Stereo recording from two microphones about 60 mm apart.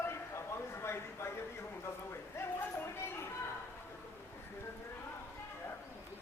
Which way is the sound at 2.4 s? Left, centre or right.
Left.